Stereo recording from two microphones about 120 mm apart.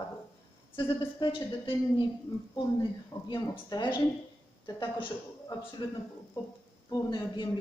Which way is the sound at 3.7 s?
35° left (ahead or behind).